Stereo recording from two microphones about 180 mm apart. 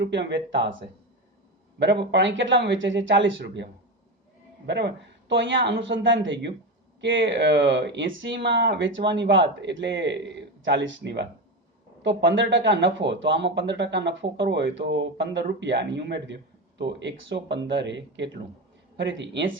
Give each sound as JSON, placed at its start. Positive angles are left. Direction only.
{"t": 0.0, "sound": "speech", "side_deg": -75}
{"t": 1.8, "sound": "speech", "side_deg": -75}
{"t": 5.3, "sound": "speech", "side_deg": -85}